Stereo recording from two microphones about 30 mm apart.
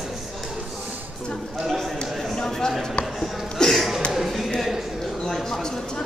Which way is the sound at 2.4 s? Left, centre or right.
Centre.